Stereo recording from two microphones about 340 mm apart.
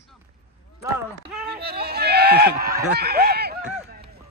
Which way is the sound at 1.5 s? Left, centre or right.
Right.